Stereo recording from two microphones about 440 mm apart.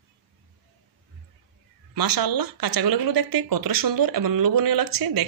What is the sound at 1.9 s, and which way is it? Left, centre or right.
Speech, right.